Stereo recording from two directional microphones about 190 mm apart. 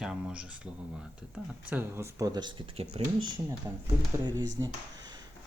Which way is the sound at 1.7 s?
10° right (ahead or behind).